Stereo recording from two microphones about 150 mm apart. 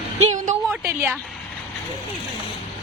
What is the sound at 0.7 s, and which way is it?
Speech, 15° right (ahead or behind).